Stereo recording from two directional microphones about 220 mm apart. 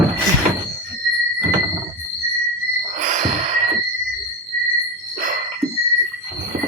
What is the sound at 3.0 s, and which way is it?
Music, 35° right (ahead or behind).